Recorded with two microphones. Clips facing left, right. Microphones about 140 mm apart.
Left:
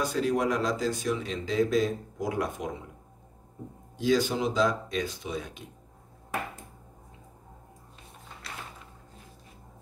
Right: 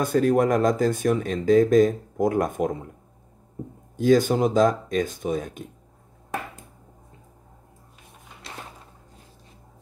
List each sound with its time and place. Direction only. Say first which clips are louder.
0.0 s speech: right 7 dB; 50° right (ahead or behind)
3.9 s speech: right 7 dB; 50° right (ahead or behind)